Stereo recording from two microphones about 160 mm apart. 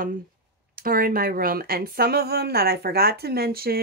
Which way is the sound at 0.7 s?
65° right (ahead or behind).